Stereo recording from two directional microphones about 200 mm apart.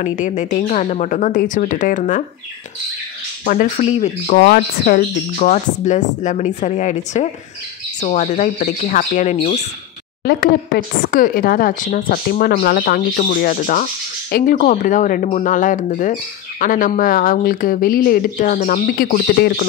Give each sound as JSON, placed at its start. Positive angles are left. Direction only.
{"t": 0.0, "sound": "speech", "side_deg": 40}
{"t": 3.4, "sound": "speech", "side_deg": 40}
{"t": 4.4, "sound": "speech", "side_deg": 50}
{"t": 10.2, "sound": "speech", "side_deg": 50}